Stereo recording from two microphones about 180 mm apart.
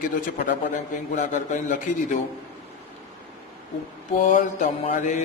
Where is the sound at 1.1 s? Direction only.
45° left (ahead or behind).